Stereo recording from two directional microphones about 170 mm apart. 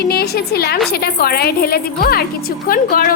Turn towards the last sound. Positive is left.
turn(degrees=60)  # may be behind; listen again after turning